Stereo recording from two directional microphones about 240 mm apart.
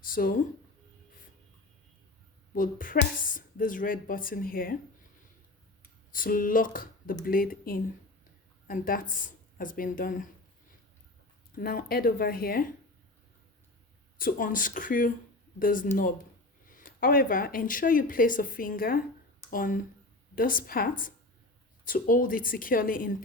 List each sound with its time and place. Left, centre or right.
0.0 s speech: left
2.6 s speech: left
6.1 s speech: left
11.5 s speech: left
14.2 s speech: left